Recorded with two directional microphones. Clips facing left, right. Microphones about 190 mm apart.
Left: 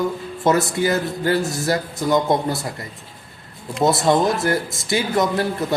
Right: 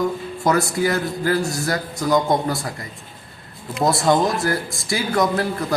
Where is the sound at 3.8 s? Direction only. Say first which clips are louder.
Left 1 dB; centre (ahead or behind).